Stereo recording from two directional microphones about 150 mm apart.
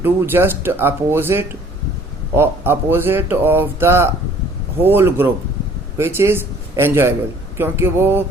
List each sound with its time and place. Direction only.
0.0 s speech: 15° right (ahead or behind)